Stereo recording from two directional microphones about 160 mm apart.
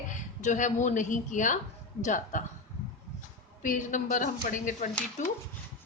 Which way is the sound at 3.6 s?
55° left (ahead or behind).